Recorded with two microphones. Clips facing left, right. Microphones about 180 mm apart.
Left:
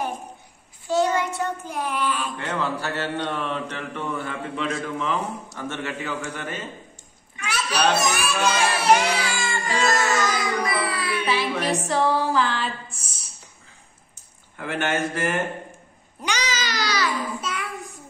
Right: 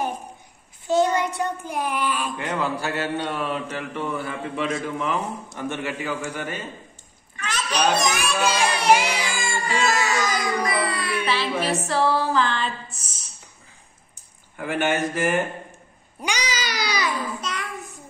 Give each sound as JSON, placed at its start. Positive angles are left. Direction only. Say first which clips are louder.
{"t": 0.8, "sound": "child singing", "louder": "right 1 dB", "side_deg": -20}
{"t": 1.7, "sound": "mantra", "louder": "right 1 dB", "side_deg": -10}
{"t": 7.3, "sound": "a sound", "louder": "even", "side_deg": 10}
{"t": 7.9, "sound": "music", "louder": "even", "side_deg": 5}
{"t": 8.9, "sound": "baby cry", "louder": "left 1 dB", "side_deg": -10}
{"t": 9.8, "sound": "music", "louder": "left 1 dB", "side_deg": 0}
{"t": 10.2, "sound": "child singing", "louder": "even", "side_deg": 0}
{"t": 11.2, "sound": "music", "louder": "even", "side_deg": 15}
{"t": 14.6, "sound": "mantra", "louder": "right 2 dB", "side_deg": -15}
{"t": 16.2, "sound": "babbling", "louder": "even", "side_deg": -10}
{"t": 17.4, "sound": "child singing", "louder": "left 1 dB", "side_deg": 5}